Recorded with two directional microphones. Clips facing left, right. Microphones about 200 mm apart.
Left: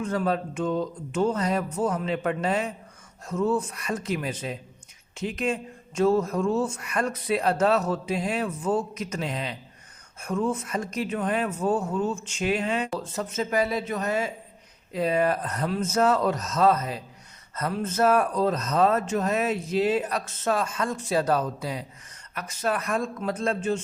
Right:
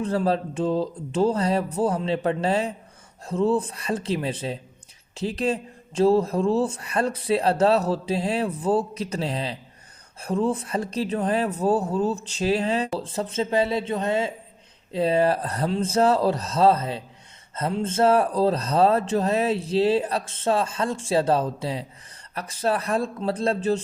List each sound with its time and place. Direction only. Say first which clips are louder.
0.0 s speech: right 3 dB; 30° right (ahead or behind)